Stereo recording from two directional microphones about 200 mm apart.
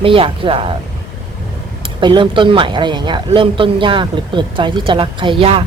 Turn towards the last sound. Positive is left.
turn(degrees=-25)  # may be behind; listen again after turning